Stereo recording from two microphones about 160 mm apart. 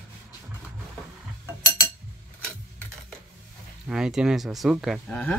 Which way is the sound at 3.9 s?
5° right (ahead or behind).